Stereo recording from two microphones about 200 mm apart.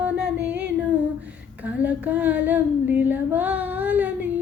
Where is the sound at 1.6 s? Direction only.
5° right (ahead or behind).